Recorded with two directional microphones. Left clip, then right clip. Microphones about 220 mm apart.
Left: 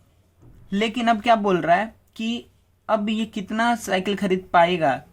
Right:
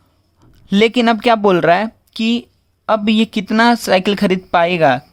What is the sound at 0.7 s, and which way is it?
Speech, 50° right (ahead or behind).